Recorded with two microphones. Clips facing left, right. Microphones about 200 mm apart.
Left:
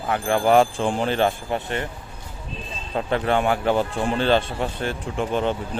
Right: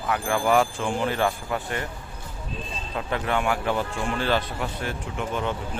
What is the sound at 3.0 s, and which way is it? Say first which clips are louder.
A man's voice: left 5 dB; 35° left (ahead or behind).